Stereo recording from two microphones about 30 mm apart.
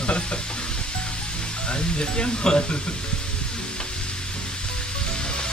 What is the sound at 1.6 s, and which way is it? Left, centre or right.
Speech, left.